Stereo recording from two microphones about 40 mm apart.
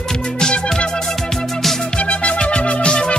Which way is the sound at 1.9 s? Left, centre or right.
Left.